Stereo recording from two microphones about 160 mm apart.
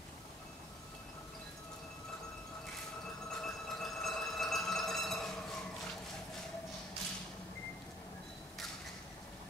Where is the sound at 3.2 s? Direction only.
5° left (ahead or behind).